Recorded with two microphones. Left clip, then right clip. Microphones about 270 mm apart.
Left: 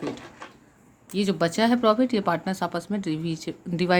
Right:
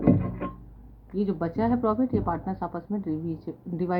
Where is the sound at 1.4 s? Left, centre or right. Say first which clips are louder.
Left 6 dB; left.